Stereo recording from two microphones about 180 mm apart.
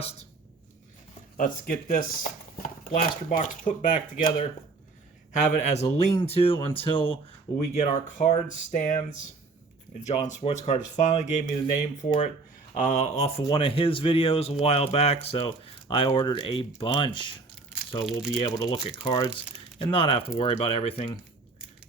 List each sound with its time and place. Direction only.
0.0 s speech: 35° left (ahead or behind)
1.4 s speech: 50° left (ahead or behind)
5.5 s speech: 40° left (ahead or behind)
8.7 s speech: 45° left (ahead or behind); by 17.3 s 30° left (ahead or behind)
18.0 s speech: centre (ahead or behind)
18.4 s speech: 25° left (ahead or behind)